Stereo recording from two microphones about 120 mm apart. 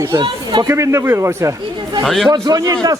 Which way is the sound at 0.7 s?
25° right (ahead or behind).